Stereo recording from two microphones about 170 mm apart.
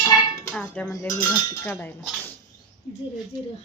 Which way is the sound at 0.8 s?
20° left (ahead or behind).